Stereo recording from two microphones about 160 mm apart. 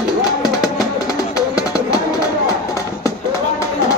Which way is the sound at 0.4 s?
25° left (ahead or behind).